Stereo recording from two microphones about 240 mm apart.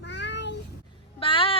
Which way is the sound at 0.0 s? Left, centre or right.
Left.